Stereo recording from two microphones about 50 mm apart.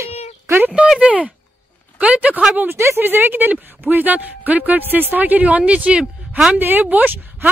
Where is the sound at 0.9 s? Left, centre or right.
Right.